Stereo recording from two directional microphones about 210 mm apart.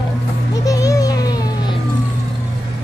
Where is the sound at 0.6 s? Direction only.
15° left (ahead or behind).